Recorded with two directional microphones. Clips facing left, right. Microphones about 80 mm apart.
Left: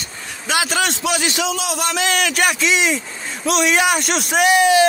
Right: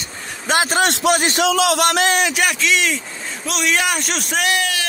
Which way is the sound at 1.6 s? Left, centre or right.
Right.